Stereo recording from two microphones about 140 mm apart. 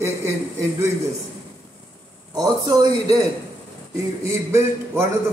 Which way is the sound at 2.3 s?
30° right (ahead or behind).